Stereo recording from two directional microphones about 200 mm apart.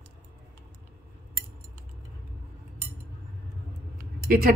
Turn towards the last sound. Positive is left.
turn(degrees=-45)  # may be behind; listen again after turning